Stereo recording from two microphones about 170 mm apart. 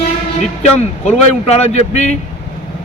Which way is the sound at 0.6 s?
40° left (ahead or behind).